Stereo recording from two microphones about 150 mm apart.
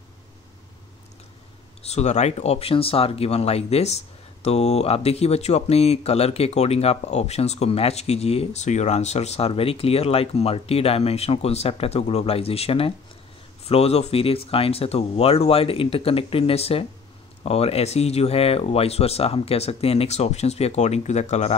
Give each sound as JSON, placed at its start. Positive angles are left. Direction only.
{"t": 1.8, "sound": "speech", "side_deg": 45}